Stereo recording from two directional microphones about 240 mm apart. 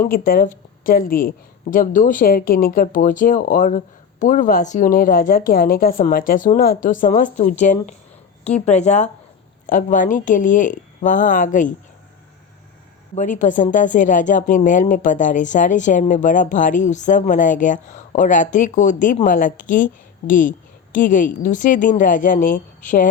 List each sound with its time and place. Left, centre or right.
0.0 s a woman's voice: left
13.1 s a woman's voice: left